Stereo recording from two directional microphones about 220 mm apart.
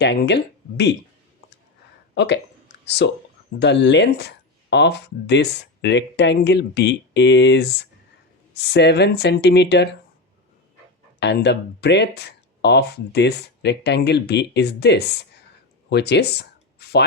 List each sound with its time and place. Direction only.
0.0 s speech: 50° left (ahead or behind)
2.1 s speech: 50° left (ahead or behind)
11.2 s speech: 50° left (ahead or behind)